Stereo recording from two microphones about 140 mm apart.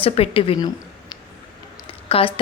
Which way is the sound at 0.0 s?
40° left (ahead or behind).